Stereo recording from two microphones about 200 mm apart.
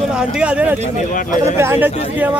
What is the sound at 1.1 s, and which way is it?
Speech, 40° left (ahead or behind).